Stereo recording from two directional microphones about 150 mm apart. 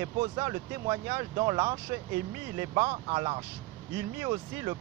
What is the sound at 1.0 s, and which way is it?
Speech, 20° right (ahead or behind).